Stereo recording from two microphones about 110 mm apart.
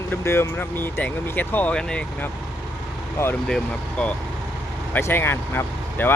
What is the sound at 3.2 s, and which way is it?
Speech, 25° left (ahead or behind).